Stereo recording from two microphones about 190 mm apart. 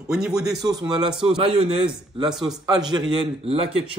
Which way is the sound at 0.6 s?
20° right (ahead or behind).